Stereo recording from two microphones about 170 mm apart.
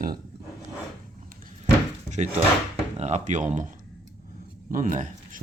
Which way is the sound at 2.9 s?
40° right (ahead or behind).